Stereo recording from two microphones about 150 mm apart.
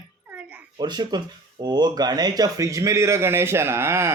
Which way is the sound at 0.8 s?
30° right (ahead or behind).